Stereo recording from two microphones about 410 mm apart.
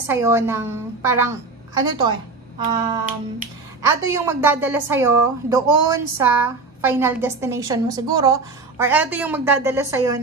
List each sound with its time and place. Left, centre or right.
0.0 s a woman's voice: centre
2.6 s finger snapping: centre
3.8 s a woman's voice: centre